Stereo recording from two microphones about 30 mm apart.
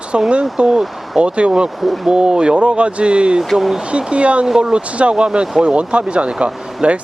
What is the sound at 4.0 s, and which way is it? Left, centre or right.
Speech, right.